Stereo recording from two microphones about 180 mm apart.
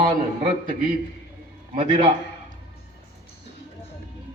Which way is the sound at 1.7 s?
30° right (ahead or behind).